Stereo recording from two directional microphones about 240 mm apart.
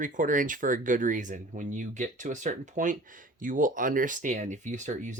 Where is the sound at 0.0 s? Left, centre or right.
Right.